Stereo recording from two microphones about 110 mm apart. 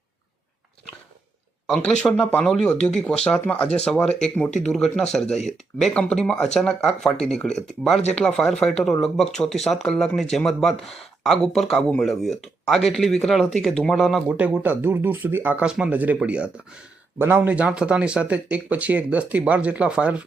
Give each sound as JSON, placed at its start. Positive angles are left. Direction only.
{"t": 1.6, "sound": "speech", "side_deg": 5}
{"t": 14.3, "sound": "speech", "side_deg": -10}
{"t": 15.6, "sound": "speech", "side_deg": -10}